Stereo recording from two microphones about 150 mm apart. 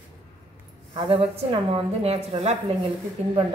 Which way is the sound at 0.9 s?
40° right (ahead or behind).